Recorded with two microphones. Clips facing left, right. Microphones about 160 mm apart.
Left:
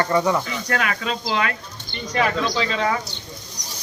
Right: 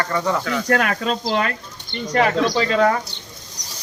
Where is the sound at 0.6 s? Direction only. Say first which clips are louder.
Right 5 dB; 50° right (ahead or behind).